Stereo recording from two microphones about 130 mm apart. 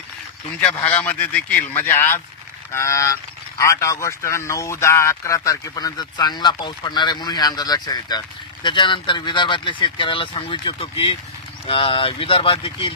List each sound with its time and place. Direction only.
0.8 s speech: 10° left (ahead or behind); by 12.9 s 45° left (ahead or behind)